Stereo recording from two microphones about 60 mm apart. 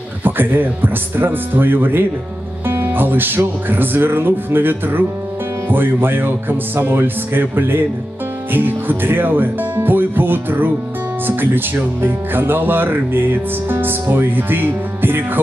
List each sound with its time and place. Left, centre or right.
0.2 s speech: right